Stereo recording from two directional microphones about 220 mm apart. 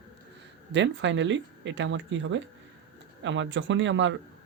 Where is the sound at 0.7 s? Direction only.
55° right (ahead or behind).